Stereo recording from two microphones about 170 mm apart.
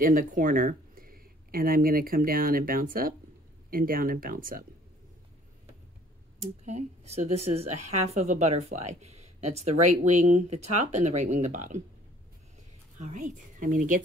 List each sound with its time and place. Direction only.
0.0 s speech: 55° right (ahead or behind)
6.6 s a woman's voice: 45° right (ahead or behind)
13.0 s speech: 50° right (ahead or behind)